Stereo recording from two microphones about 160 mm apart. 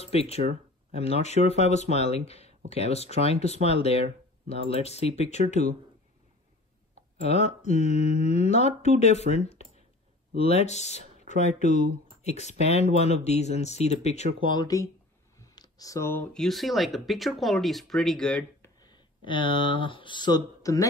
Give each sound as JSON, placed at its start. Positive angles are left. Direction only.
{"t": 0.0, "sound": "speech", "side_deg": 40}
{"t": 7.2, "sound": "speech", "side_deg": 45}
{"t": 14.5, "sound": "speech", "side_deg": 25}
{"t": 15.3, "sound": "a sound", "side_deg": 25}
{"t": 16.3, "sound": "speech", "side_deg": 0}
{"t": 18.6, "sound": "speech", "side_deg": 25}